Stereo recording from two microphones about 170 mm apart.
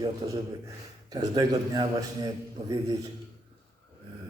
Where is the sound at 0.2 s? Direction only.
25° right (ahead or behind).